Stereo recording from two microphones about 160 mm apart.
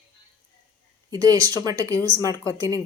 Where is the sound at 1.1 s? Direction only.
20° right (ahead or behind).